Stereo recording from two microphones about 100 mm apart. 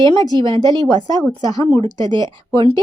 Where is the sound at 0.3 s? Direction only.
50° right (ahead or behind).